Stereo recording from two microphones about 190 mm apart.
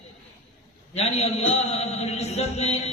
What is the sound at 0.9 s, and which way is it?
A man's voice, 35° left (ahead or behind).